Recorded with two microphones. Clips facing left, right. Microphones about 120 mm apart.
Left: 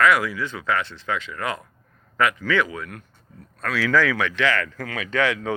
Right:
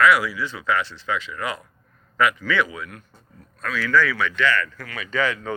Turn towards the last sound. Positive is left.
turn(degrees=85)